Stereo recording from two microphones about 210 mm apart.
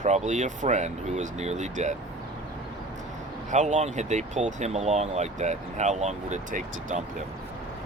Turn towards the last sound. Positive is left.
turn(degrees=-35)  # may be behind; listen again after turning